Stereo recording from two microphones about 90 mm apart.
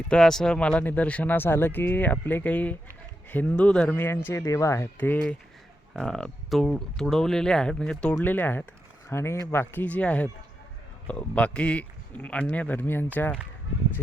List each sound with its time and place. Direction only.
0.1 s speech: 5° left (ahead or behind)
3.9 s speech: 25° left (ahead or behind)
4.4 s speech: 35° left (ahead or behind)
4.9 s speech: 20° left (ahead or behind)
8.2 s speech: 20° left (ahead or behind)
9.8 s speech: 15° left (ahead or behind)